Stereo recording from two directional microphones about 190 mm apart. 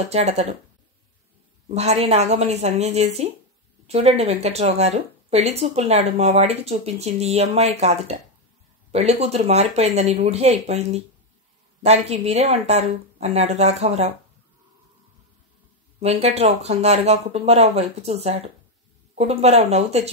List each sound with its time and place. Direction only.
0.1 s speech: 35° right (ahead or behind)
1.7 s speech: 35° right (ahead or behind)
16.0 s speech: 35° right (ahead or behind)